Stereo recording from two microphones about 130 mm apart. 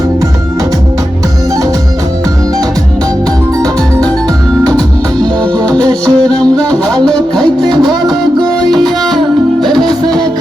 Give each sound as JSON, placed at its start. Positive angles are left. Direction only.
{"t": 5.2, "sound": "music", "side_deg": -30}
{"t": 6.3, "sound": "music", "side_deg": 5}
{"t": 9.7, "sound": "music", "side_deg": -35}